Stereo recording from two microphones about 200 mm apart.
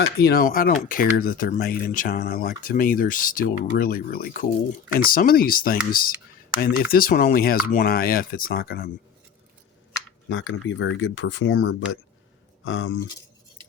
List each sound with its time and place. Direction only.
0.0 s speech: 50° left (ahead or behind)
10.2 s speech: 70° left (ahead or behind)